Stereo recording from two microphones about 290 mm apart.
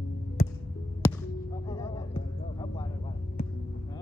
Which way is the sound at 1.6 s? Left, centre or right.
Centre.